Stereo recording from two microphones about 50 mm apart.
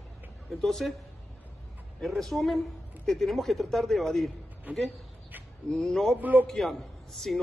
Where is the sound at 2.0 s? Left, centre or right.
Centre.